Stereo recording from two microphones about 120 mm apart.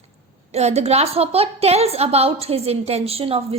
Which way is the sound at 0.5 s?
60° right (ahead or behind).